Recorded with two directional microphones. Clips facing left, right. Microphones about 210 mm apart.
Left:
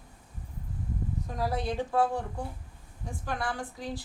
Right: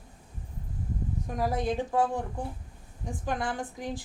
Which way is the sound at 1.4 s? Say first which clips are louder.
Right 2 dB; 15° right (ahead or behind).